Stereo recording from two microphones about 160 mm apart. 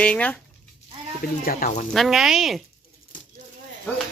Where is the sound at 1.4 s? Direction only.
65° left (ahead or behind).